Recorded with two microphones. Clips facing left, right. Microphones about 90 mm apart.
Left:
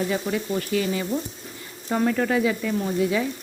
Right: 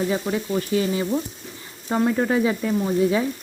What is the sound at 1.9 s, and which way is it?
Frying, 20° right (ahead or behind).